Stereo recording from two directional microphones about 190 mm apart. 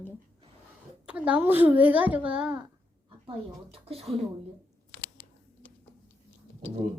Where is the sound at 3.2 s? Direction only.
30° right (ahead or behind).